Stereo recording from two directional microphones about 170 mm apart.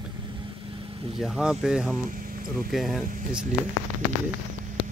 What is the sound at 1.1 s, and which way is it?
Speech, centre (ahead or behind).